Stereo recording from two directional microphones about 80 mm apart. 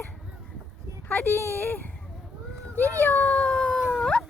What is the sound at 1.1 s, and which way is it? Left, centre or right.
Speech, left.